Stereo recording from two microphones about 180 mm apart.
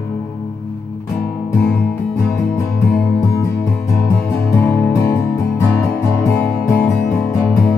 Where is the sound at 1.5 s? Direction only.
15° left (ahead or behind).